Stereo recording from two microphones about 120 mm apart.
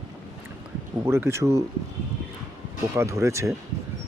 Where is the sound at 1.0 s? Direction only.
20° right (ahead or behind).